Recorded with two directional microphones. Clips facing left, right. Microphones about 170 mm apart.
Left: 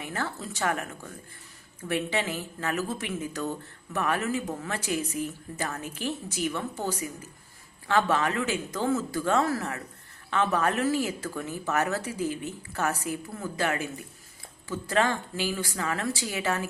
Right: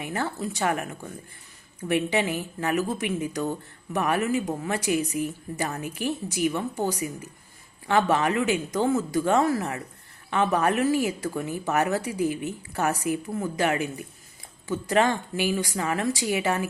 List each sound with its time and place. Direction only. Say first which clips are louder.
0.0 s a woman's voice: right 4 dB; 15° right (ahead or behind)